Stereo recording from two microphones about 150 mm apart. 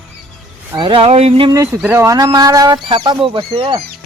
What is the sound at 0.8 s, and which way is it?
Speech, 35° right (ahead or behind).